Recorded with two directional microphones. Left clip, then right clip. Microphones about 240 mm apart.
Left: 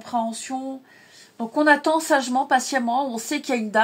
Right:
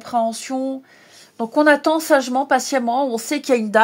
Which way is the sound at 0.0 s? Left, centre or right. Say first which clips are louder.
Right 5 dB; right.